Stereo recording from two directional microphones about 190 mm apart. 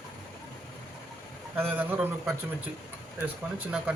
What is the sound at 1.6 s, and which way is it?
Speech, 10° right (ahead or behind).